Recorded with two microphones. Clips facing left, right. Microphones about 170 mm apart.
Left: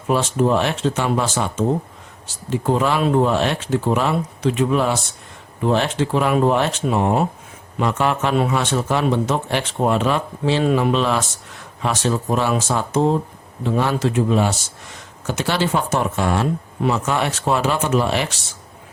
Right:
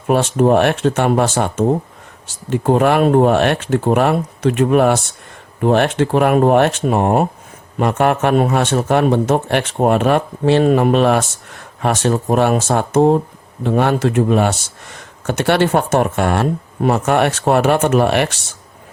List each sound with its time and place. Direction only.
0.1 s speech: 55° right (ahead or behind)